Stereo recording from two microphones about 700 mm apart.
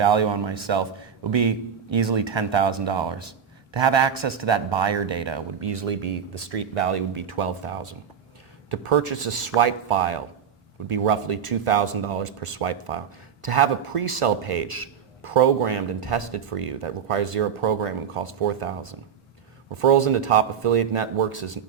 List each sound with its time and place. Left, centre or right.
0.0 s a man's voice: right
5.9 s speech: right
19.8 s speech: right